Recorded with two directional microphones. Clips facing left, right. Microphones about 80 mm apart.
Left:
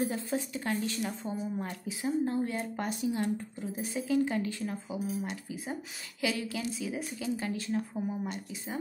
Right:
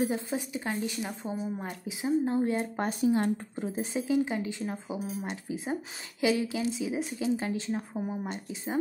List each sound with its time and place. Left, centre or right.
0.1 s a woman's voice: centre
3.0 s a woman's voice: right